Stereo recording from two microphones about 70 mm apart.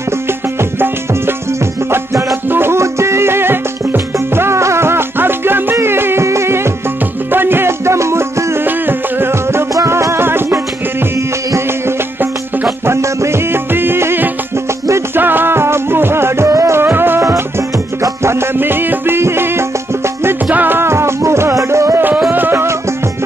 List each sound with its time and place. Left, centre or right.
0.6 s music: right
1.9 s music: right
12.8 s music: right
16.8 s music: right
22.3 s music: right